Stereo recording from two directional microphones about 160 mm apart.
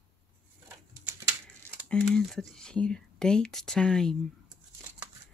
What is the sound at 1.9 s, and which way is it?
Speech, 5° left (ahead or behind).